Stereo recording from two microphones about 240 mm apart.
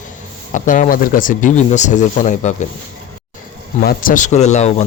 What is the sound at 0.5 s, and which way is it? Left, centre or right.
A man's voice, left.